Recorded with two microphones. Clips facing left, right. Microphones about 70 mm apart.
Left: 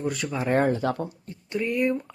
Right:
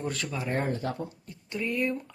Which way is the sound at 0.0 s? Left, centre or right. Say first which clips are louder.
Left 4 dB; centre.